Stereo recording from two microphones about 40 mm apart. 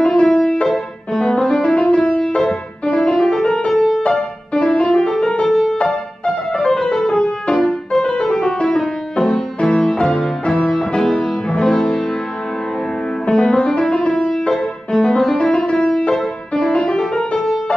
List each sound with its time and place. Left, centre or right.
0.0 s music: centre
1.6 s music: left
3.7 s music: centre
4.1 s music: centre
5.5 s music: centre
5.8 s music: centre
13.3 s music: centre